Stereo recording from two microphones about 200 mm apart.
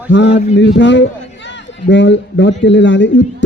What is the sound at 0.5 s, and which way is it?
A man's voice, 65° left (ahead or behind).